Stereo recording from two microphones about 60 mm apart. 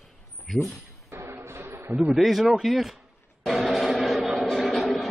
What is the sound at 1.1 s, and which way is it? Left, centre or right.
Music, right.